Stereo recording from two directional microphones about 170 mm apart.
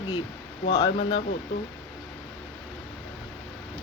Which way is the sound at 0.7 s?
25° left (ahead or behind).